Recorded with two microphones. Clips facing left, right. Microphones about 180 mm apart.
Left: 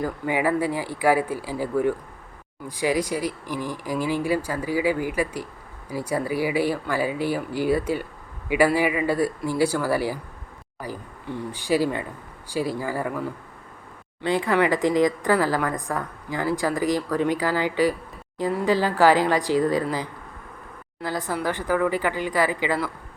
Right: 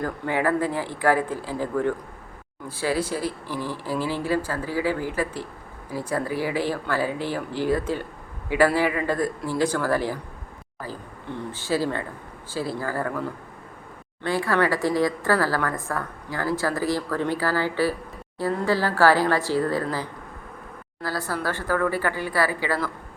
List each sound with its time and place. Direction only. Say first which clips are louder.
0.0 s a woman's voice: left 1 dB; 10° left (ahead or behind)
14.3 s a woman's voice: left 2 dB; 20° left (ahead or behind)